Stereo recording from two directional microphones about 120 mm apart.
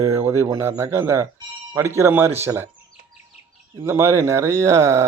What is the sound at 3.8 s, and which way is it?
Speech, 20° right (ahead or behind).